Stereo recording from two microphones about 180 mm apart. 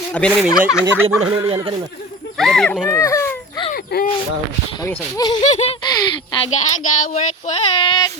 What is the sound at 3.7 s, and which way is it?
Speech, 55° left (ahead or behind).